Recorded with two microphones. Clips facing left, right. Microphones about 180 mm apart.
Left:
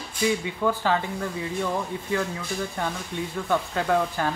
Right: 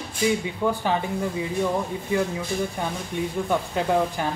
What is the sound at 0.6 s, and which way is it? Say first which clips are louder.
Speech: left 2 dB; 15° right (ahead or behind).